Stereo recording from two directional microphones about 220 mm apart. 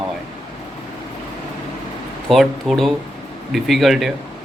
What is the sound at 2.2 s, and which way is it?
A man's voice, centre (ahead or behind).